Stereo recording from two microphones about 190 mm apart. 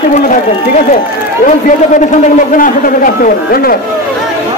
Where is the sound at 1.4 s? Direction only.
40° left (ahead or behind).